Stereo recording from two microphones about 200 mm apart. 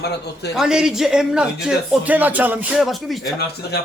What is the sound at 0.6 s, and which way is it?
Speech, 5° right (ahead or behind).